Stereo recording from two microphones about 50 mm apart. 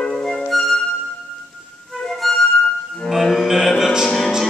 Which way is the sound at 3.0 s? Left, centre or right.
Centre.